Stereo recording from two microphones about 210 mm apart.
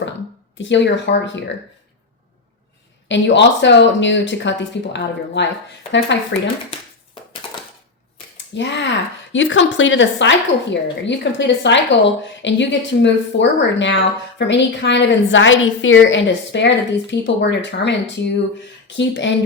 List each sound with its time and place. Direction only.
0.6 s speech: 60° left (ahead or behind)
3.1 s speech: 60° left (ahead or behind)
7.4 s a sound: 25° left (ahead or behind)
8.5 s speech: 60° left (ahead or behind)